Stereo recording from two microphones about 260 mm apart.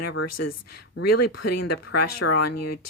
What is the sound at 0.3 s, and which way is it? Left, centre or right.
Speech, left.